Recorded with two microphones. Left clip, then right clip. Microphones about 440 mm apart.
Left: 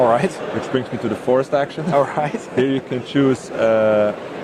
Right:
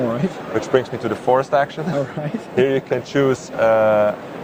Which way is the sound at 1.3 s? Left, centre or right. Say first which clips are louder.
Right 1 dB; right.